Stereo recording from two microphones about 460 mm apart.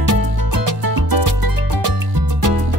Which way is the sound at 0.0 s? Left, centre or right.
Right.